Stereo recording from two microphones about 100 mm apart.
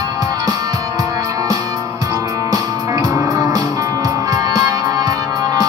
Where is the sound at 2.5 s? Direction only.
35° right (ahead or behind).